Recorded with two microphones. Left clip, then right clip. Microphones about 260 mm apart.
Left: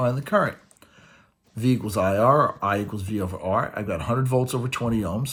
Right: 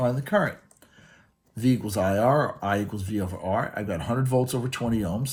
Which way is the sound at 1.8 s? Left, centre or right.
Left.